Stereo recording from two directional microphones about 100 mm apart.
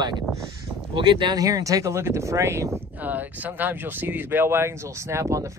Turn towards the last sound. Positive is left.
turn(degrees=-30)  # may be behind; listen again after turning